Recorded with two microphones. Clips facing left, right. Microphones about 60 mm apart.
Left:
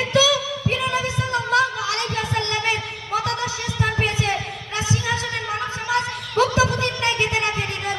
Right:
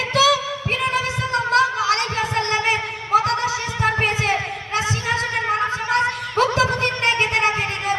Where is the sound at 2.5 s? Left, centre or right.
Right.